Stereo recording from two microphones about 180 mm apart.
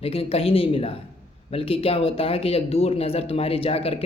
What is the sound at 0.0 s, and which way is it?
Speech, 30° left (ahead or behind).